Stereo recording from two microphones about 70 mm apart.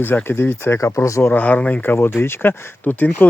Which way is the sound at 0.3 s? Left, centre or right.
Left.